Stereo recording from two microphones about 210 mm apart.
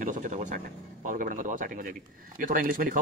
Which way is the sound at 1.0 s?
40° right (ahead or behind).